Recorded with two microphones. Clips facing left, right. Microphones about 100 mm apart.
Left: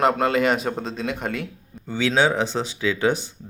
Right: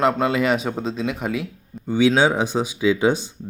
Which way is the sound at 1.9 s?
15° right (ahead or behind).